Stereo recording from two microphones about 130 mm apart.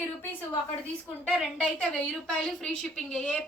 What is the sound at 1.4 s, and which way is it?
A woman's voice, 10° left (ahead or behind).